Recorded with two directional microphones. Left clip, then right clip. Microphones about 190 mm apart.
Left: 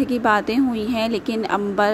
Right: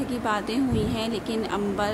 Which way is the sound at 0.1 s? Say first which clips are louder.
Left 8 dB; 35° left (ahead or behind).